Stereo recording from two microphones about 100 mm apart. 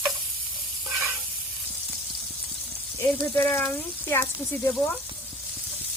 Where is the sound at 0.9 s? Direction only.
Centre (ahead or behind).